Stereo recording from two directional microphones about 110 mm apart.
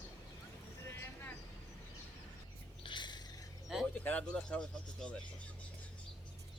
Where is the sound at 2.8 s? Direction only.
45° left (ahead or behind).